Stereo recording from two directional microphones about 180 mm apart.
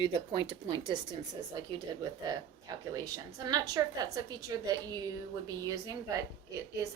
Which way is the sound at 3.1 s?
20° right (ahead or behind).